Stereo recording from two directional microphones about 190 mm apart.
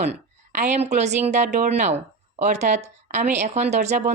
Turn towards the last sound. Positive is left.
turn(degrees=-40)  # may be behind; listen again after turning